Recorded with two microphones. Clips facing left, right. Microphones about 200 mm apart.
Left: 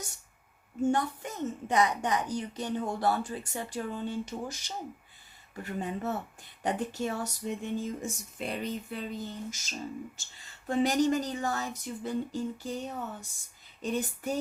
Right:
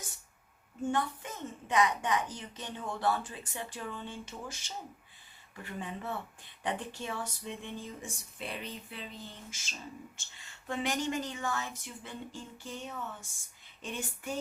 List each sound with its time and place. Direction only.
0.9 s a woman's voice: 40° left (ahead or behind)
5.6 s a woman's voice: 45° left (ahead or behind)